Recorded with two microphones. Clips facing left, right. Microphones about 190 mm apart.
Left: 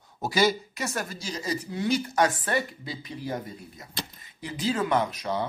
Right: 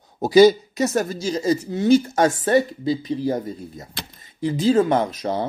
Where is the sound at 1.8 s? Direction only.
45° right (ahead or behind).